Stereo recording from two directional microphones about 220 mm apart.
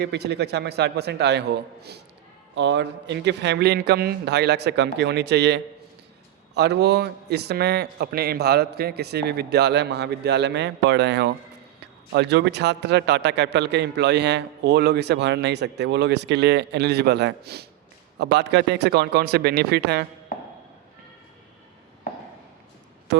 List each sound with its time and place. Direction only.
0.0 s a man's voice: 50° right (ahead or behind)